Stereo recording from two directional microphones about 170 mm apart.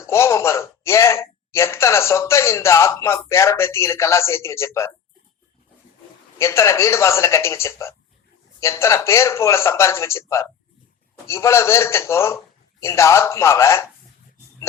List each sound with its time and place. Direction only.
0.0 s a man's voice: 15° left (ahead or behind)
6.4 s a man's voice: 15° left (ahead or behind)